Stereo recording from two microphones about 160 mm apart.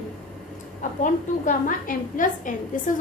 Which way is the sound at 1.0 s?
55° left (ahead or behind).